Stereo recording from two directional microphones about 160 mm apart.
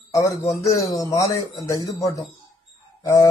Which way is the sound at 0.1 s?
20° left (ahead or behind).